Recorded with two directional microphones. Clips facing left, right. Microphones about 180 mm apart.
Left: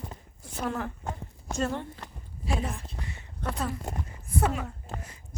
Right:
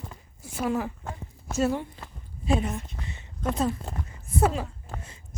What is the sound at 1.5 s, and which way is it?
Speech, 10° right (ahead or behind).